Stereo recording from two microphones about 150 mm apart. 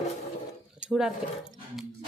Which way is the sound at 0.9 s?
Centre (ahead or behind).